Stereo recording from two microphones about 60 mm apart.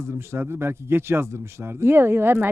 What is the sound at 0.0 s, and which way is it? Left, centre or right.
Speech, right.